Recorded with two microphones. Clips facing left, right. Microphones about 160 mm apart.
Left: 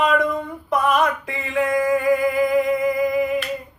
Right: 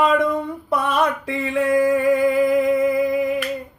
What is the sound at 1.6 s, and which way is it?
Music, 30° right (ahead or behind).